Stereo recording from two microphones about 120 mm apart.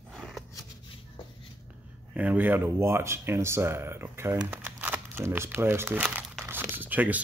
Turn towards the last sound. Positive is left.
turn(degrees=-15)  # may be behind; listen again after turning